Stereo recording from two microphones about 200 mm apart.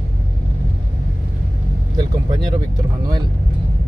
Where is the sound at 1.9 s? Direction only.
20° right (ahead or behind).